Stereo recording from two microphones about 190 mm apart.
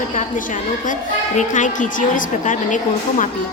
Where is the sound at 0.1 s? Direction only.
40° left (ahead or behind).